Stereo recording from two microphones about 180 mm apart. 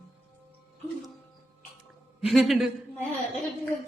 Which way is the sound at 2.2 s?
Centre (ahead or behind).